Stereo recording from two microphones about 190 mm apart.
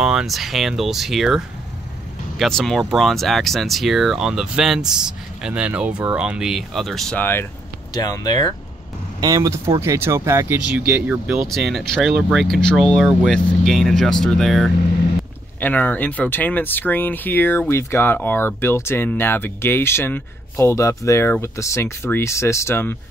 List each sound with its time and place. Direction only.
0.0 s speech: 5° right (ahead or behind); by 8.5 s 20° left (ahead or behind)
9.2 s speech: 20° right (ahead or behind); by 22.9 s 15° left (ahead or behind)